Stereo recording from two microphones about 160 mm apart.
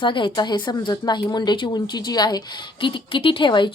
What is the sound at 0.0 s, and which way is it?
Speech, 30° left (ahead or behind).